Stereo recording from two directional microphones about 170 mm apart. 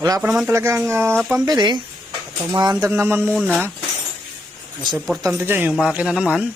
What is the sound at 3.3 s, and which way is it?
Speech, centre (ahead or behind).